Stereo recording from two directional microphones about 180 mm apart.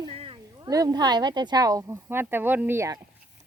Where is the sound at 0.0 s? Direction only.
30° right (ahead or behind); by 3.0 s 15° right (ahead or behind).